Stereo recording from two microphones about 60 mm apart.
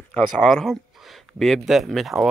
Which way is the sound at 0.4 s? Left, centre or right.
Centre.